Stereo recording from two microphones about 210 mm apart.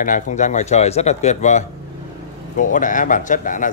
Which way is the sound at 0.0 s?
35° left (ahead or behind).